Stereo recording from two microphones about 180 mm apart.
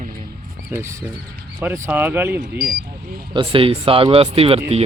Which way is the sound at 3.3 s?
25° right (ahead or behind).